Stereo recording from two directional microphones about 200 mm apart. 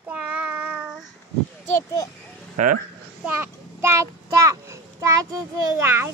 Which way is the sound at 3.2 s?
10° right (ahead or behind).